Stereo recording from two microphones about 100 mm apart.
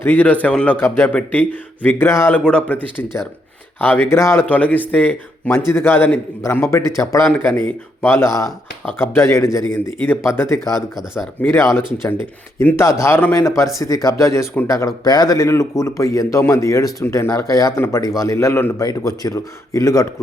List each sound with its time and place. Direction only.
0.0 s speech: 20° left (ahead or behind)
2.3 s speech: 10° left (ahead or behind)
10.9 s speech: 5° right (ahead or behind)
11.4 s speech: 25° left (ahead or behind)
17.7 s speech: 25° left (ahead or behind)
18.8 s speech: 40° left (ahead or behind)